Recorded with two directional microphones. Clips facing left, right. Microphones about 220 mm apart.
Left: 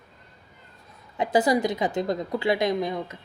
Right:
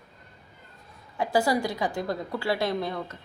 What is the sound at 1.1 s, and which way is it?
A woman's voice, 20° left (ahead or behind).